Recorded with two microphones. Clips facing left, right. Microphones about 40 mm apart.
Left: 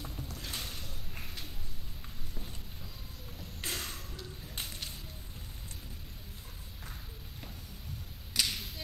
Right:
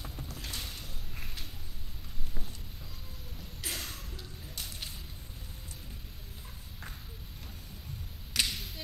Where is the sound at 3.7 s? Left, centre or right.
Centre.